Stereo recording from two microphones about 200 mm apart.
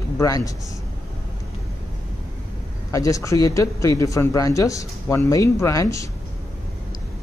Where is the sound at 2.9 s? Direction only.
15° left (ahead or behind).